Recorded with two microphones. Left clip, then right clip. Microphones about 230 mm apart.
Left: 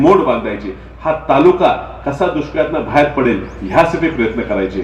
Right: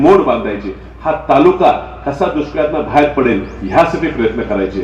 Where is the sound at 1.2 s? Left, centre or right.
Left.